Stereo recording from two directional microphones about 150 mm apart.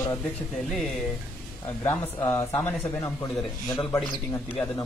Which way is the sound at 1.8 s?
15° left (ahead or behind).